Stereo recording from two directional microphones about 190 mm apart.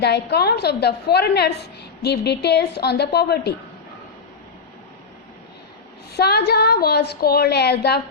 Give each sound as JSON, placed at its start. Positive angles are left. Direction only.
{"t": 0.0, "sound": "a woman's voice", "side_deg": 60}
{"t": 6.1, "sound": "a woman's voice", "side_deg": 60}